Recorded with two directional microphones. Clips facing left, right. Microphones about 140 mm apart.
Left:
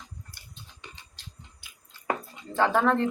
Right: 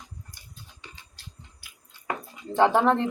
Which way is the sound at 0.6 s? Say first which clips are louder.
Left 1 dB; 20° left (ahead or behind).